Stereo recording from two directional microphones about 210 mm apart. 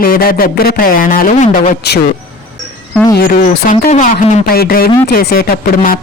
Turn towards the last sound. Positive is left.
turn(degrees=45)  # may be behind; listen again after turning